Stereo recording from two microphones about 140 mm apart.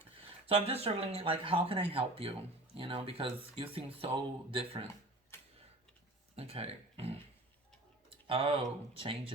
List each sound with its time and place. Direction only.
0.4 s speech: 45° right (ahead or behind)
5.3 s tick-tock: 15° left (ahead or behind)
6.3 s speech: 45° right (ahead or behind)